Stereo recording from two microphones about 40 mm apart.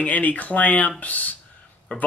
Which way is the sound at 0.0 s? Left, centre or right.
Left.